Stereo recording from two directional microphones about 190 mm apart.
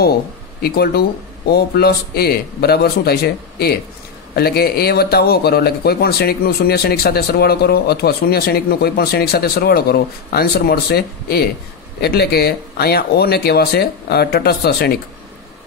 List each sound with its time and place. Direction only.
0.6 s speech: 55° left (ahead or behind)